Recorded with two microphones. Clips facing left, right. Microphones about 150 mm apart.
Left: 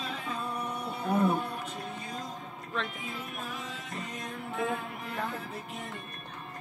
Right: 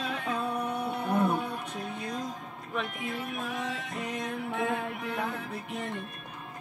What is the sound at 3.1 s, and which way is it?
Music, centre (ahead or behind).